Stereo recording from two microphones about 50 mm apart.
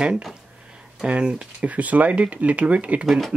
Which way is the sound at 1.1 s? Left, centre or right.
Right.